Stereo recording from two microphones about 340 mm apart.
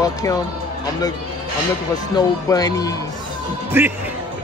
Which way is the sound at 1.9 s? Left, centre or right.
Centre.